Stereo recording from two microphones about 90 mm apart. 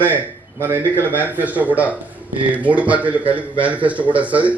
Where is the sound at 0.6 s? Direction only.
25° right (ahead or behind).